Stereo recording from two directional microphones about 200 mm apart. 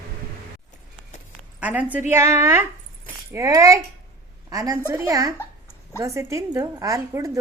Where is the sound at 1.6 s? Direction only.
5° right (ahead or behind).